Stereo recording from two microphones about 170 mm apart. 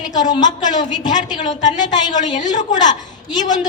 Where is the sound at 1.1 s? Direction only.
25° left (ahead or behind).